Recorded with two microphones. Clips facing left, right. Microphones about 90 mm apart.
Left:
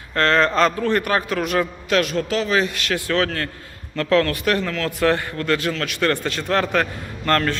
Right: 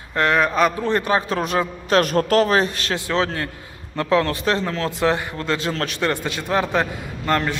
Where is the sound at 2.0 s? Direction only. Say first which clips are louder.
Right 6 dB; 45° right (ahead or behind).